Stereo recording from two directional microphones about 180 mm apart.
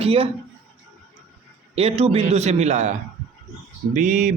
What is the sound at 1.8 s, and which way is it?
Speech, 35° right (ahead or behind).